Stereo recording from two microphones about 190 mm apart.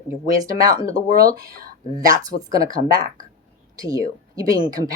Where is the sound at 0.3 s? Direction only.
20° right (ahead or behind).